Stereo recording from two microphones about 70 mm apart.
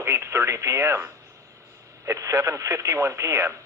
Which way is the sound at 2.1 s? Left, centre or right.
Right.